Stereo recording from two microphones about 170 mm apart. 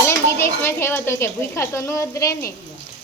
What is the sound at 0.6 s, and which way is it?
A woman's voice, 15° left (ahead or behind).